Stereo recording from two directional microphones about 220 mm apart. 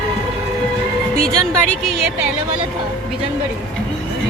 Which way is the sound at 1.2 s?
5° left (ahead or behind).